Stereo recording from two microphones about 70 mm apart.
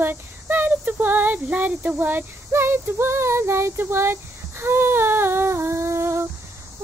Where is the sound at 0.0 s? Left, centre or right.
Right.